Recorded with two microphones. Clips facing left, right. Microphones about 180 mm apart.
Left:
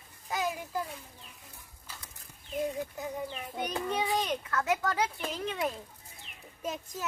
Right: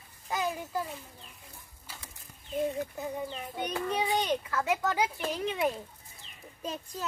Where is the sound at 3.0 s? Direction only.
Centre (ahead or behind).